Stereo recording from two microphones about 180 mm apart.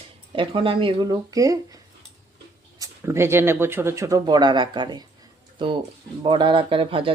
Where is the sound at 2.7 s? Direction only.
15° right (ahead or behind).